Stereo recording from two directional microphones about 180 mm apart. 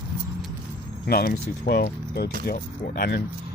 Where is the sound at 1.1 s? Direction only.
55° left (ahead or behind).